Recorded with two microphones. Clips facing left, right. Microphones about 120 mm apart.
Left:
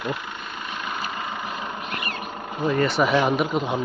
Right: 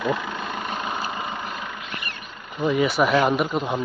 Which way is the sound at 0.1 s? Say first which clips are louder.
Right 5 dB; 90° right.